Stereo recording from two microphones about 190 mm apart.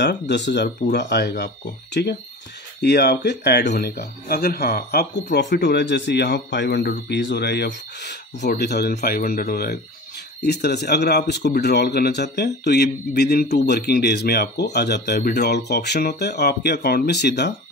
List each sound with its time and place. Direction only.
0.0 s a man's voice: 65° left (ahead or behind)